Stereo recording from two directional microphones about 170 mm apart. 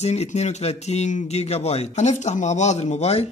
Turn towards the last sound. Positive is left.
turn(degrees=40)  # may be behind; listen again after turning